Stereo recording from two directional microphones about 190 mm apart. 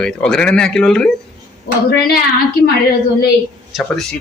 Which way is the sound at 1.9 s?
55° left (ahead or behind).